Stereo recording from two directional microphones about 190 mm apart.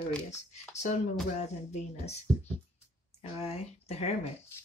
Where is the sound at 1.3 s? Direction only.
35° left (ahead or behind).